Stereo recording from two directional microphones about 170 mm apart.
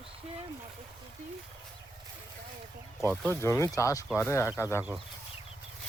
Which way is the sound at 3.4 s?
15° left (ahead or behind).